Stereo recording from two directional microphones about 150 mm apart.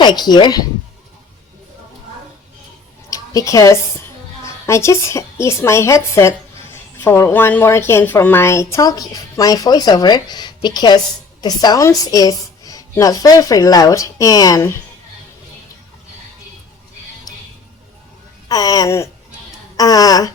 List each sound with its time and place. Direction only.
0.0 s speech: 30° left (ahead or behind)
3.1 s a woman's voice: 20° left (ahead or behind)
18.4 s speech: 25° left (ahead or behind)